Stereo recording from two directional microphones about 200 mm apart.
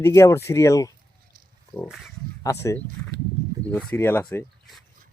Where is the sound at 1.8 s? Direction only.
Centre (ahead or behind).